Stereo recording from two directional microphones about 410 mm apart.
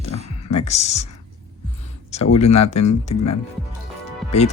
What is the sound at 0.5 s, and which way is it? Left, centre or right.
Speech, centre.